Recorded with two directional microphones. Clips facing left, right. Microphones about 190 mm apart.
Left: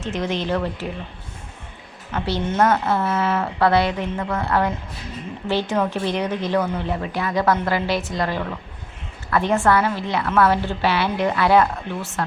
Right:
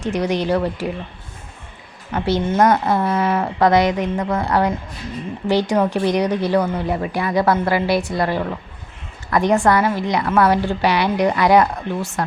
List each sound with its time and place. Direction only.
0.0 s speech: 15° right (ahead or behind)
2.1 s speech: 15° right (ahead or behind)